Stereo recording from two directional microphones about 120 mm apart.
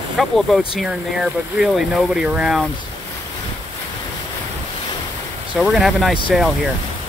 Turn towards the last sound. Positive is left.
turn(degrees=0)  # may be behind; listen again after turning